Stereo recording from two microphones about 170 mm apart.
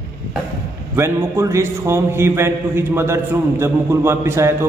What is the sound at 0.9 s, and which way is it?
A man's voice, 15° right (ahead or behind).